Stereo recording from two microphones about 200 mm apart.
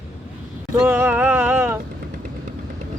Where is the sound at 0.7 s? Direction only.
10° right (ahead or behind).